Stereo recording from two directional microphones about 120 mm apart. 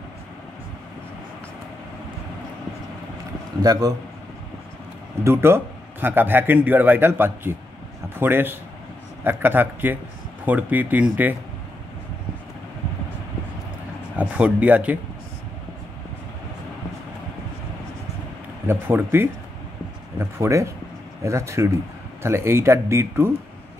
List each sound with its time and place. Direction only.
3.6 s a man's voice: 30° right (ahead or behind)
5.2 s a man's voice: 20° right (ahead or behind)
14.1 s a man's voice: 10° right (ahead or behind)
18.7 s speech: 20° right (ahead or behind)